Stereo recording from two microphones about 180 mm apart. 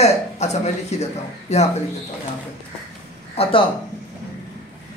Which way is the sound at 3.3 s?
35° left (ahead or behind).